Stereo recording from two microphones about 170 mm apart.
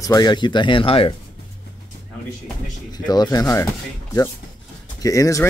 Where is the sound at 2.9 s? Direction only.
25° left (ahead or behind).